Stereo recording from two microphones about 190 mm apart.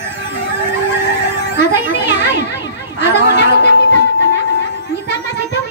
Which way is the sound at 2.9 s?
65° left (ahead or behind).